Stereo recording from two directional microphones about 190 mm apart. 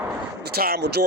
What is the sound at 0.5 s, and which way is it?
Speech, 55° right (ahead or behind).